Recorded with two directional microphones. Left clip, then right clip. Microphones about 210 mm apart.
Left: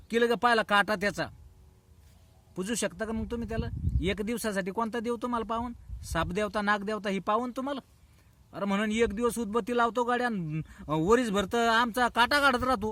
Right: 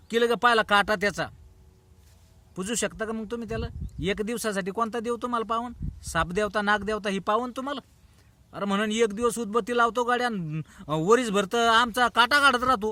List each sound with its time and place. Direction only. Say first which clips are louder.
0.1 s speech: right 3 dB; 5° right (ahead or behind)
2.6 s a man's voice: right 3 dB; 5° right (ahead or behind)